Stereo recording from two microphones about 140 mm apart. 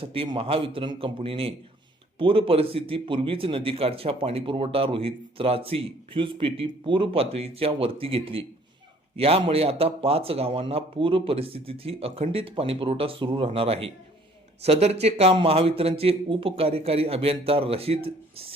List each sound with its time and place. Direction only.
0.0 s a man's voice: 40° right (ahead or behind)